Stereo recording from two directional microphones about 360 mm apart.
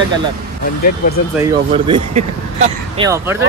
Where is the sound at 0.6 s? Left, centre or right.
Left.